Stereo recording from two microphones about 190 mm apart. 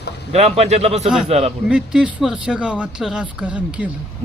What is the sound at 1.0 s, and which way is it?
Speech, 5° right (ahead or behind).